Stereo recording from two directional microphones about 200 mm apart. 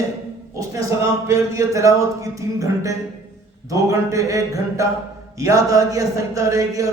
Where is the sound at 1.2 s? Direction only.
15° right (ahead or behind).